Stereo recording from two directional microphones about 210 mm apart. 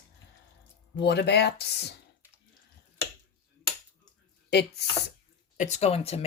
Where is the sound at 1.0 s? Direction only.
50° left (ahead or behind).